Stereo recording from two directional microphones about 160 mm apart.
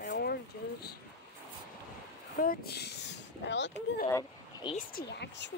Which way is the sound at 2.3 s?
65° left (ahead or behind).